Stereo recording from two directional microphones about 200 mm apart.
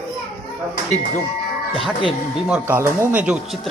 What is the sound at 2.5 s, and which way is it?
Speech, 10° right (ahead or behind).